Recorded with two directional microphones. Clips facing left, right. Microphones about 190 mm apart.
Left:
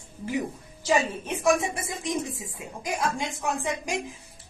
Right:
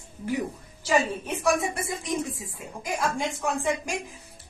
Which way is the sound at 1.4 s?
20° left (ahead or behind).